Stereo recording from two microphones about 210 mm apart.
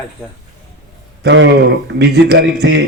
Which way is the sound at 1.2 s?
55° right (ahead or behind).